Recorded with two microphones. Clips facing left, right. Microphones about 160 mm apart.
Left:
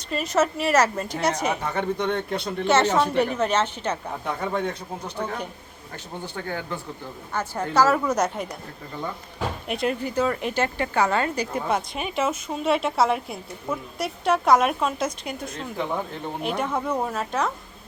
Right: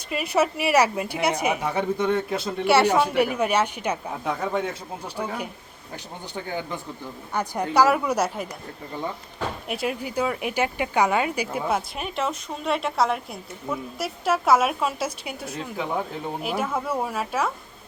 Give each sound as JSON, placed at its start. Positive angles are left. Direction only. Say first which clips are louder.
{"t": 0.1, "sound": "a woman's voice", "louder": "even", "side_deg": -10}
{"t": 9.6, "sound": "a woman's voice", "louder": "left 4 dB", "side_deg": -5}